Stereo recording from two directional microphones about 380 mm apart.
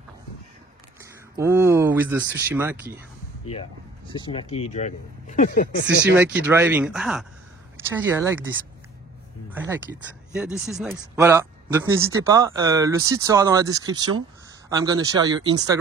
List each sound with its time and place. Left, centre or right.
1.3 s speech: centre
4.3 s speech: centre
6.1 s speech: centre
9.5 s speech: centre